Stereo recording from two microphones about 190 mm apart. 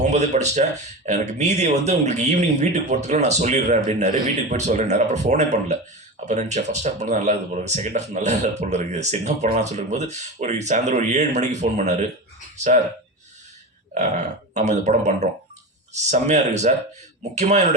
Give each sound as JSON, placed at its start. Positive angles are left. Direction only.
{"t": 0.0, "sound": "speech", "side_deg": -35}
{"t": 13.9, "sound": "speech", "side_deg": -40}